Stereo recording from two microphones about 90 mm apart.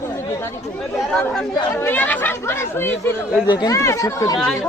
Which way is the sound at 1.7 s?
20° left (ahead or behind).